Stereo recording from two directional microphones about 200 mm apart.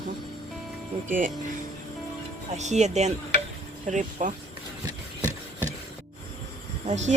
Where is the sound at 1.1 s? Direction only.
40° right (ahead or behind).